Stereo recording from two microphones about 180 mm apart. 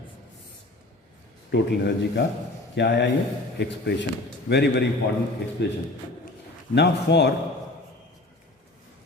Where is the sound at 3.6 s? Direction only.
85° left.